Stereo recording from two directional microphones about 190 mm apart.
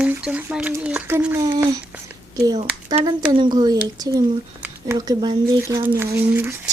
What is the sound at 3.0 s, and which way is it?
Speech, 20° right (ahead or behind).